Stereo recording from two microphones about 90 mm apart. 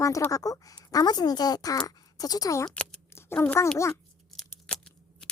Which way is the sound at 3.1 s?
25° left (ahead or behind).